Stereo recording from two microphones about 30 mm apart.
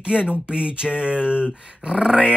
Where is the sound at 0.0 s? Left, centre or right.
Right.